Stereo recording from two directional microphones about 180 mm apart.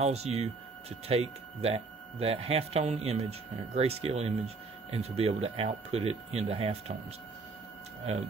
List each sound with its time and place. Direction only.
0.0 s speech: 35° right (ahead or behind)